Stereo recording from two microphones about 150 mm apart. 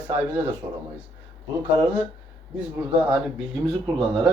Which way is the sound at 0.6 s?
35° right (ahead or behind).